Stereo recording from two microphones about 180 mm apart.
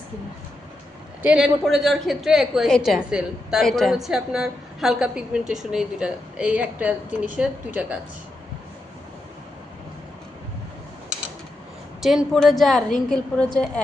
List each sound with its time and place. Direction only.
1.2 s a woman's voice: 5° right (ahead or behind)
12.0 s a woman's voice: centre (ahead or behind)